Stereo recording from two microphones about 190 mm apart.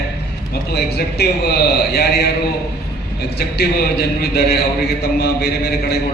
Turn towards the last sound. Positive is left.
turn(degrees=55)  # may be behind; listen again after turning